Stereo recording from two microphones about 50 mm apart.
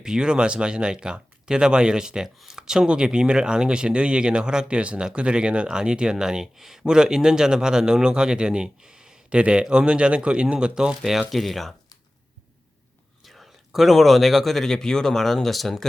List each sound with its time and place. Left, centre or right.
0.0 s speech: centre
11.3 s speech: centre
13.2 s speech: centre